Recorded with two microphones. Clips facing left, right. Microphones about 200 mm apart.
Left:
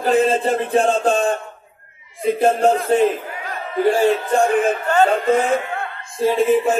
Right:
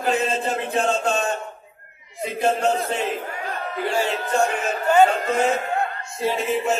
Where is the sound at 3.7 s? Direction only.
50° left (ahead or behind).